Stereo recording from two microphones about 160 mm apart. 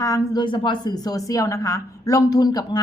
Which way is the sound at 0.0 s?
25° left (ahead or behind).